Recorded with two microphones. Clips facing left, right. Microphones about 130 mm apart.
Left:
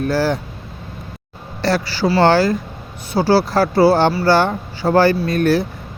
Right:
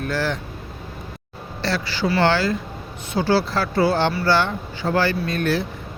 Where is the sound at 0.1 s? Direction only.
35° left (ahead or behind).